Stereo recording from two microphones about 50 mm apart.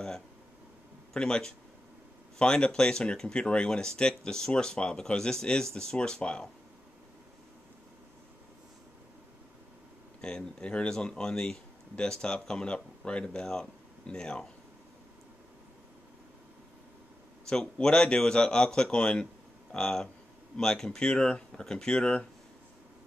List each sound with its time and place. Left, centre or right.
1.1 s speech: centre
10.2 s speech: centre
17.5 s speech: centre